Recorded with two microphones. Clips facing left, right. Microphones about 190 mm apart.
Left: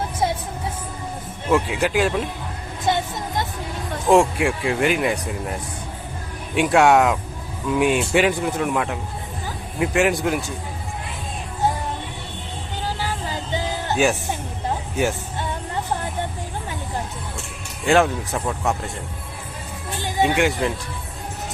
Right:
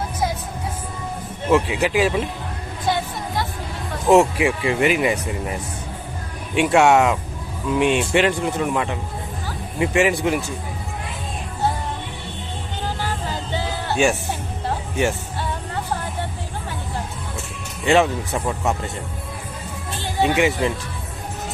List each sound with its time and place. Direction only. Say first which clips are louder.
1.5 s speech: right 2 dB; centre (ahead or behind)
2.8 s music: left 1 dB; 20° left (ahead or behind)
4.0 s speech: right 2 dB; centre (ahead or behind)
13.0 s a sound: right 1 dB; 10° left (ahead or behind)
13.9 s speech: right 1 dB; centre (ahead or behind)
17.8 s speech: even; centre (ahead or behind)
20.2 s speech: right 1 dB; centre (ahead or behind)